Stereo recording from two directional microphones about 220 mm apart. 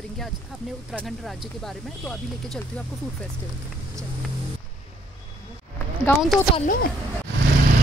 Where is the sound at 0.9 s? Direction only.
Centre (ahead or behind).